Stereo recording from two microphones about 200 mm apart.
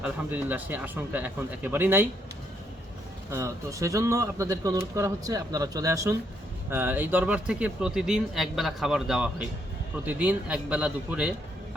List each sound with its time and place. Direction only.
0.0 s speech: 10° right (ahead or behind)
3.3 s a man's voice: 15° right (ahead or behind)